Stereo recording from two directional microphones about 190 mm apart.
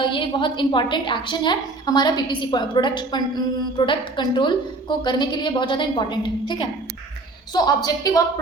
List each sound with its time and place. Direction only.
0.0 s a woman's voice: 25° left (ahead or behind)